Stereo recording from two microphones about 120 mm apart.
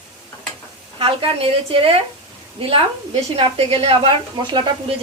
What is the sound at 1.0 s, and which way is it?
A woman's voice, 50° right (ahead or behind).